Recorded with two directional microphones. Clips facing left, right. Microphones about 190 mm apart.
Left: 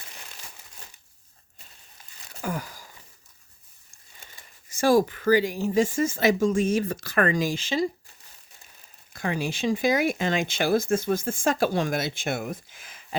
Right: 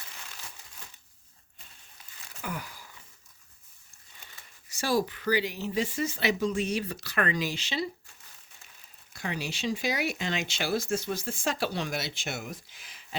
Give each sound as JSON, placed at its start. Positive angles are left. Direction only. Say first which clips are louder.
{"t": 2.4, "sound": "a sound", "louder": "left 6 dB", "side_deg": 40}
{"t": 4.7, "sound": "speech", "louder": "left 8 dB", "side_deg": 50}
{"t": 9.1, "sound": "speech", "louder": "left 6 dB", "side_deg": 50}